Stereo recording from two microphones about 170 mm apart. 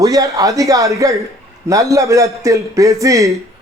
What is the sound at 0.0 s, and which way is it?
Speech, 20° right (ahead or behind).